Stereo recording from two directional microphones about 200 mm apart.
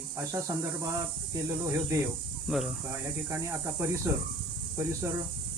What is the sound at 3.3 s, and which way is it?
Speech, 10° right (ahead or behind).